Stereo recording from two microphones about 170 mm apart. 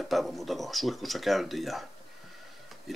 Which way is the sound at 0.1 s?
Centre (ahead or behind).